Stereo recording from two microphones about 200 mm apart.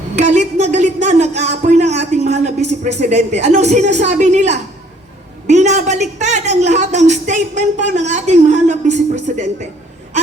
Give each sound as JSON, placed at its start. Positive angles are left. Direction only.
{"t": 0.2, "sound": "speech", "side_deg": -35}